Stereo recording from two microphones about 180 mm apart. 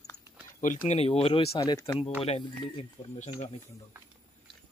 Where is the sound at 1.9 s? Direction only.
35° left (ahead or behind).